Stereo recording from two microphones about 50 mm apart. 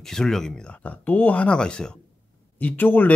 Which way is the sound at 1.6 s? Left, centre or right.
Centre.